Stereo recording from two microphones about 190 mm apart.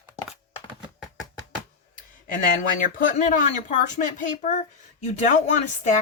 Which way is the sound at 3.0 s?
45° left (ahead or behind).